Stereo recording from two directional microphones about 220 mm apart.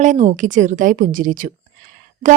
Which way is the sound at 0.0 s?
35° right (ahead or behind).